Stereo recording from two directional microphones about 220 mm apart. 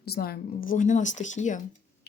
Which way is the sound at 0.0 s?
45° left (ahead or behind).